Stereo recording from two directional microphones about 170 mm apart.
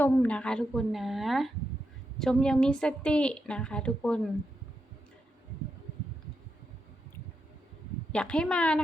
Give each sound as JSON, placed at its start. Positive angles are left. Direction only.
{"t": 0.0, "sound": "a woman's voice", "side_deg": 10}
{"t": 8.1, "sound": "a woman's voice", "side_deg": 5}